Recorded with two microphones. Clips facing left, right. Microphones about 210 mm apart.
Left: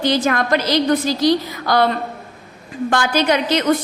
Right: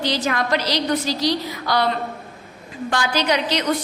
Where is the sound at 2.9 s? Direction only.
50° left (ahead or behind).